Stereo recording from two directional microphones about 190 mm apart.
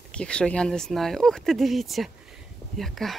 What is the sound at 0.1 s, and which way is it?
Speech, 5° left (ahead or behind).